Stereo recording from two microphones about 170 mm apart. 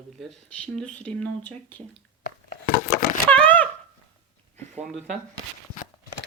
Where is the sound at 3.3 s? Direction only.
10° left (ahead or behind).